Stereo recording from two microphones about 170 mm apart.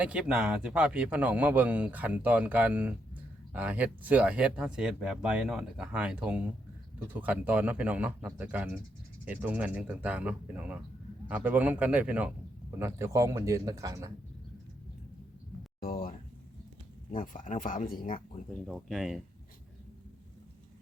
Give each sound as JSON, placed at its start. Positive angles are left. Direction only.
{"t": 0.0, "sound": "a man's voice", "side_deg": -5}
{"t": 15.8, "sound": "speech", "side_deg": 55}
{"t": 18.6, "sound": "speech", "side_deg": 0}